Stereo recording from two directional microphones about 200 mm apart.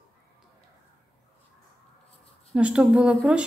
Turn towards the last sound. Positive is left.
turn(degrees=-5)  # may be behind; listen again after turning